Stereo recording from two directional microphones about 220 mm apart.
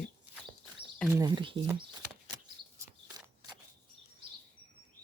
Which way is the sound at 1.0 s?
15° right (ahead or behind).